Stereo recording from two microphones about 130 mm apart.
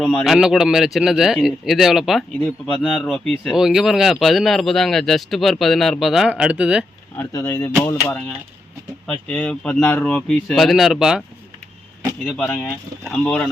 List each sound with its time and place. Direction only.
0.1 s speech: 10° left (ahead or behind)
0.3 s speech: 5° right (ahead or behind)
7.2 s speech: 20° left (ahead or behind); by 11.2 s 5° right (ahead or behind)
12.4 s speech: 10° left (ahead or behind)